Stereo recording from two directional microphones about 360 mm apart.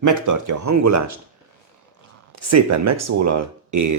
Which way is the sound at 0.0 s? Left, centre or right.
Right.